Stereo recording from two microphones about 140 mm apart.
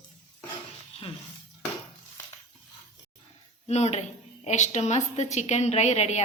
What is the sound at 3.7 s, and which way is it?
A woman's voice, 50° left (ahead or behind).